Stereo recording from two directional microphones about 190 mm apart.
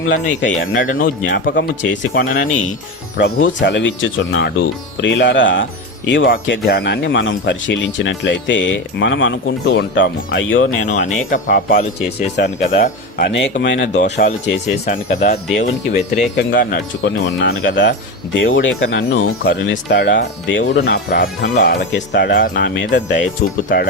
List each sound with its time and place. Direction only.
0.1 s speech: 75° left (ahead or behind)
0.7 s speech: 45° left (ahead or behind)
1.5 s speech: 75° left (ahead or behind)
2.1 s speech: 45° left (ahead or behind)
3.2 s speech: 70° left (ahead or behind); by 10.7 s 85° left
10.8 s speech: 40° left (ahead or behind)
13.5 s speech: 55° left (ahead or behind)
14.8 s speech: 40° left (ahead or behind)
15.9 s speech: 60° left (ahead or behind)
17.0 s speech: 70° left (ahead or behind)
18.3 s speech: 80° left; by 23.2 s 65° left (ahead or behind)